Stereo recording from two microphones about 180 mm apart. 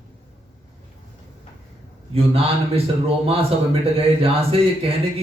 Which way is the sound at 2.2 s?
30° right (ahead or behind).